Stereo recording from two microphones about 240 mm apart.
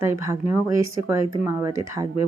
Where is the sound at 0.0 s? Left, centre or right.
Centre.